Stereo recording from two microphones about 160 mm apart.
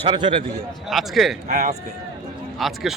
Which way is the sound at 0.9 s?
Centre (ahead or behind).